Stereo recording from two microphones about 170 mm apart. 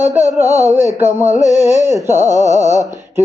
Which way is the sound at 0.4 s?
20° left (ahead or behind).